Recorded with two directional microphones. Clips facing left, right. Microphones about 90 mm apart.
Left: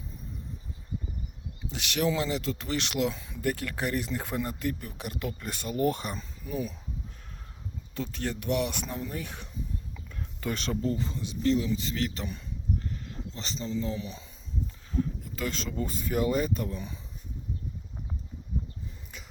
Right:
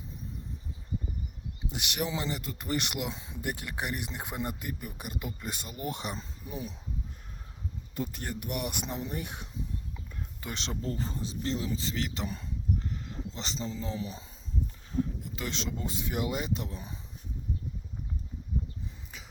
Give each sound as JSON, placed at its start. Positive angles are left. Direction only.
{"t": 1.6, "sound": "speech", "side_deg": -15}
{"t": 3.2, "sound": "speech", "side_deg": -25}
{"t": 7.9, "sound": "speech", "side_deg": -10}
{"t": 10.8, "sound": "speech", "side_deg": -40}
{"t": 12.8, "sound": "a sound", "side_deg": -25}
{"t": 13.3, "sound": "speech", "side_deg": -25}
{"t": 15.2, "sound": "speech", "side_deg": 45}
{"t": 15.8, "sound": "speech", "side_deg": -20}